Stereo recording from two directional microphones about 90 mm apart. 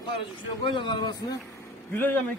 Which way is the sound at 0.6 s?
65° left (ahead or behind).